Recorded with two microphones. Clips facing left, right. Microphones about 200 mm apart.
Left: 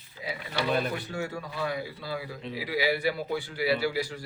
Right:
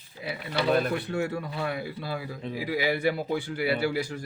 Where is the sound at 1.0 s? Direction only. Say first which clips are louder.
Right 5 dB; 55° right (ahead or behind).